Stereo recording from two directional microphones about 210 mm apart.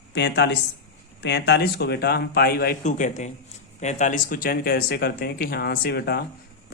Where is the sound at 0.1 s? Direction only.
55° left (ahead or behind).